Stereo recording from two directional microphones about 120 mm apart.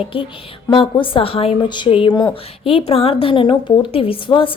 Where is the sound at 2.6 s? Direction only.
50° left (ahead or behind).